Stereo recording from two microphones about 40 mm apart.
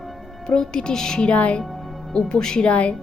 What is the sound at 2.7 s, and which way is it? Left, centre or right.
Speech, left.